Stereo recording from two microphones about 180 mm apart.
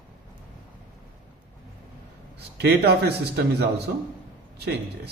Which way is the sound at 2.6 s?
70° right (ahead or behind).